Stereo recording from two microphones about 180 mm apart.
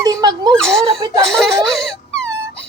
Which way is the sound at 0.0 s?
20° right (ahead or behind).